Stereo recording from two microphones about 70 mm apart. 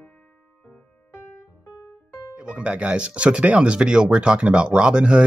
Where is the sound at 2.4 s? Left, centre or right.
Centre.